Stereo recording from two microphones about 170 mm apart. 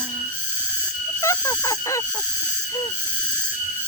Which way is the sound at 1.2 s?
20° left (ahead or behind).